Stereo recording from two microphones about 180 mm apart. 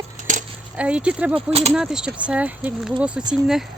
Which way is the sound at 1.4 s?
35° right (ahead or behind).